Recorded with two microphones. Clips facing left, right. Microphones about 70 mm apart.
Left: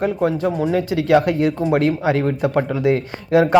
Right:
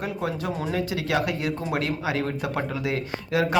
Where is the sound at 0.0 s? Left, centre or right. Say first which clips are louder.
Left 10 dB; left.